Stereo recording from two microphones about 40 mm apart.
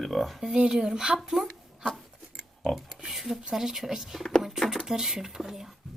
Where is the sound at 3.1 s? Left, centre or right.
Centre.